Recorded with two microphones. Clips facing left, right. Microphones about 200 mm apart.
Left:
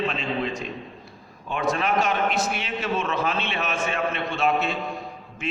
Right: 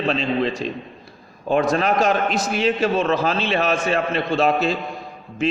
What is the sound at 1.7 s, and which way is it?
A man's voice, 40° right (ahead or behind).